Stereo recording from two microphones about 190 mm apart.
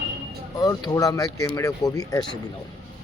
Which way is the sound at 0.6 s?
20° left (ahead or behind).